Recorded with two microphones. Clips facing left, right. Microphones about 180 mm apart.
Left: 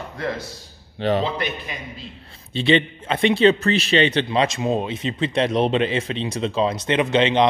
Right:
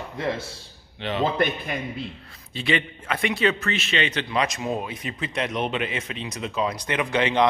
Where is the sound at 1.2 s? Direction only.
50° right (ahead or behind).